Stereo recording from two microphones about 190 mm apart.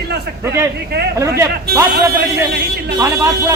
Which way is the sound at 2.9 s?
15° right (ahead or behind).